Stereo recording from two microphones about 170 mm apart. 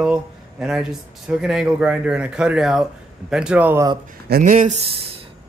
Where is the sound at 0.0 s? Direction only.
5° right (ahead or behind).